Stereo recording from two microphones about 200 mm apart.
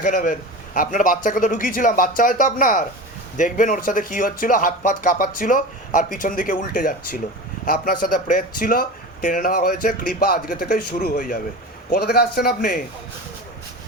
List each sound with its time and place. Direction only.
0.0 s speech: 45° left (ahead or behind)